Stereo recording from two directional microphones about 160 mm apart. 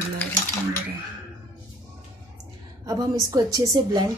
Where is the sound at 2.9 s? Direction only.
25° right (ahead or behind).